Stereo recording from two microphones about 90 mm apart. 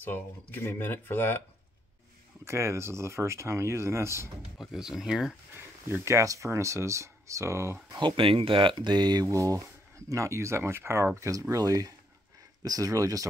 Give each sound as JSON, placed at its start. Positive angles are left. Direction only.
{"t": 0.0, "sound": "speech", "side_deg": 20}
{"t": 2.4, "sound": "speech", "side_deg": -30}
{"t": 4.6, "sound": "speech", "side_deg": -5}
{"t": 5.6, "sound": "speech", "side_deg": -25}
{"t": 8.0, "sound": "speech", "side_deg": -85}
{"t": 8.7, "sound": "speech", "side_deg": -55}
{"t": 9.3, "sound": "speech", "side_deg": -35}